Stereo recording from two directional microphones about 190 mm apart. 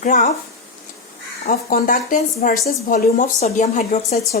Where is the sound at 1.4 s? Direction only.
45° left (ahead or behind).